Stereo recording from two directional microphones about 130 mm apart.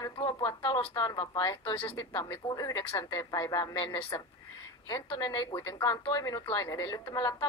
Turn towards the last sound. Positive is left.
turn(degrees=35)  # may be behind; listen again after turning